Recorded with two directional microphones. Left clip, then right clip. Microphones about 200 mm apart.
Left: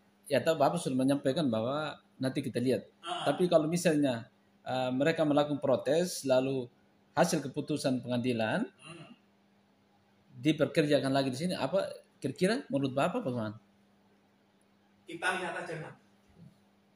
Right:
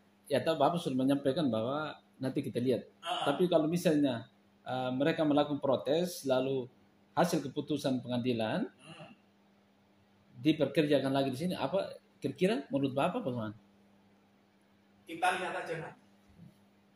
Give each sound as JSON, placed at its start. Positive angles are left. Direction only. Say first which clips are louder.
{"t": 0.3, "sound": "speech", "louder": "left 2 dB", "side_deg": 15}
{"t": 10.4, "sound": "speech", "louder": "left 1 dB", "side_deg": 15}